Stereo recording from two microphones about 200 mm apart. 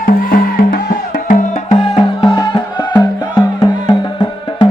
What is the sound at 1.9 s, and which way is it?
Music, 25° left (ahead or behind).